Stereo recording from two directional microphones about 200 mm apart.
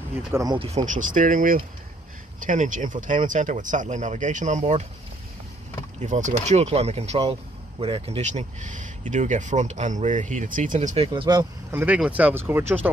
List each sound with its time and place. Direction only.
0.3 s speech: 20° right (ahead or behind)
0.8 s speech: 40° right (ahead or behind)
5.9 s speech: 35° right (ahead or behind)
11.7 s speech: 10° right (ahead or behind)